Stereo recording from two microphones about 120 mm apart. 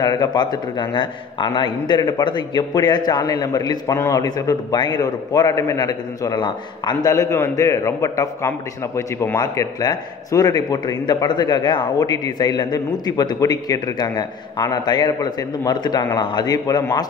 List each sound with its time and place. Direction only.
0.0 s a man's voice: 35° left (ahead or behind); by 9.4 s 20° left (ahead or behind)
9.4 s a man's voice: 30° left (ahead or behind)